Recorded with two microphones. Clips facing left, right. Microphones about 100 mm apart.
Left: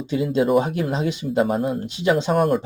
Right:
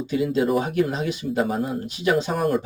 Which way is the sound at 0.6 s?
25° left (ahead or behind).